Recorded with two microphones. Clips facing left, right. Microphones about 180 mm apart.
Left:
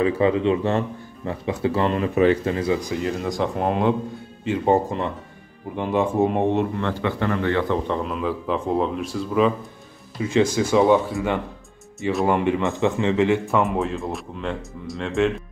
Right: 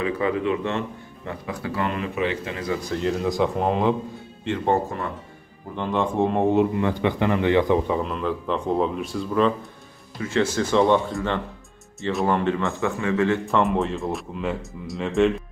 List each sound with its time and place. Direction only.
0.0 s speech: 25° left (ahead or behind)
2.9 s a man's voice: centre (ahead or behind)
5.8 s a man's voice: 10° left (ahead or behind)
6.8 s a man's voice: 15° right (ahead or behind); by 9.5 s 5° left (ahead or behind)
10.1 s speech: 15° left (ahead or behind)
13.5 s a man's voice: centre (ahead or behind)